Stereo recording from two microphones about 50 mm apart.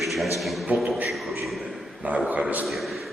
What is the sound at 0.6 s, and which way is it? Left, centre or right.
Speech, right.